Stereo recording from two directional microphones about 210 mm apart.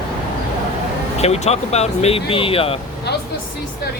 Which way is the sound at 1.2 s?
30° left (ahead or behind).